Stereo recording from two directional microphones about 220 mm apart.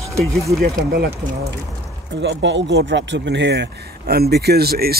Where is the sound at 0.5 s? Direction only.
45° right (ahead or behind).